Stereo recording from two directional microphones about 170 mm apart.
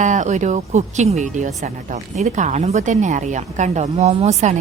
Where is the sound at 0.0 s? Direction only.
45° right (ahead or behind).